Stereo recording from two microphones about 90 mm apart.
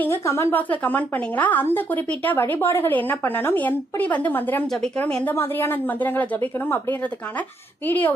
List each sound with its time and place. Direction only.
0.0 s a woman's voice: 30° left (ahead or behind)
0.7 s a woman's voice: 20° left (ahead or behind)
5.3 s a woman's voice: 25° left (ahead or behind)